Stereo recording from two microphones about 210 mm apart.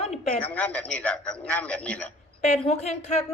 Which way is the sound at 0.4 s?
5° left (ahead or behind).